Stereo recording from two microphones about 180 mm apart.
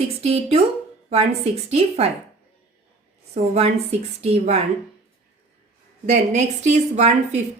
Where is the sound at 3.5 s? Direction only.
35° right (ahead or behind).